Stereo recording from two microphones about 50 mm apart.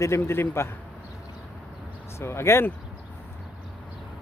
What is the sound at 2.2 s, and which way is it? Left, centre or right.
Speech, left.